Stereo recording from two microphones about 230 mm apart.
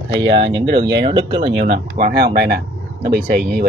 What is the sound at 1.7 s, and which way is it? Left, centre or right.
Speech, right.